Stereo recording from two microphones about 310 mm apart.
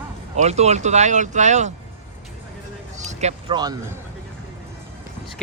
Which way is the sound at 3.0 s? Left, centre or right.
Right.